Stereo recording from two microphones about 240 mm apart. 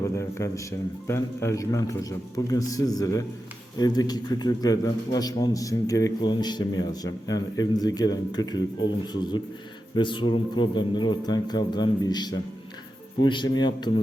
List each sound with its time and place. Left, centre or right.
0.2 s a man's voice: centre
9.9 s speech: centre